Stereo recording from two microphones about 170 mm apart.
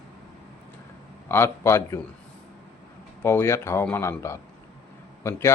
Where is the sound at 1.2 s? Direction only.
15° left (ahead or behind).